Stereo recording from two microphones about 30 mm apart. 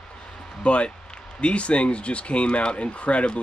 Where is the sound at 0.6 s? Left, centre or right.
Left.